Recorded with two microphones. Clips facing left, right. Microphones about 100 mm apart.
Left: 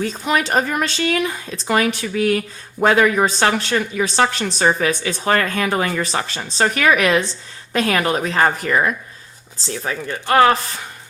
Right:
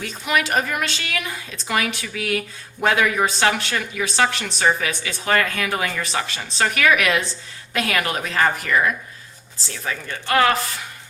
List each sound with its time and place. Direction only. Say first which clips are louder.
0.0 s a woman's voice: left 3 dB; 35° left (ahead or behind)